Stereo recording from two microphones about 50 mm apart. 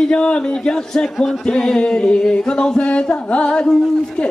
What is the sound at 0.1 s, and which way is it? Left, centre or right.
A man's voice, centre.